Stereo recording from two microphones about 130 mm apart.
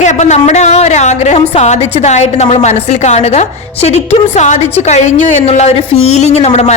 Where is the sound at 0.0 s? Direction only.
65° left (ahead or behind).